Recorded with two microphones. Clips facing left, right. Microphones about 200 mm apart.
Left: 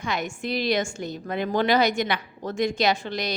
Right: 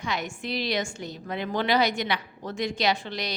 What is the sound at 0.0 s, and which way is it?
A woman's voice, 50° left (ahead or behind).